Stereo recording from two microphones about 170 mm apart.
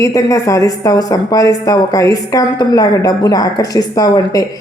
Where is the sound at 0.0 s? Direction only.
20° left (ahead or behind).